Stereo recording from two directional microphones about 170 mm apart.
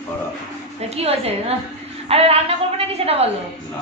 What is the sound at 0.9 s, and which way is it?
A woman's voice, 35° right (ahead or behind).